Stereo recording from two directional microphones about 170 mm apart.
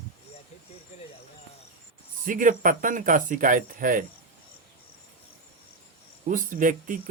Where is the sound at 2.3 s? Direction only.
50° right (ahead or behind).